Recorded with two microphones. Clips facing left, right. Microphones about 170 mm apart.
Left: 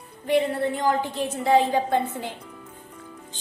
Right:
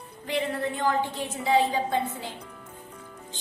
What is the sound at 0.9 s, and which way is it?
A woman's voice, 45° left (ahead or behind).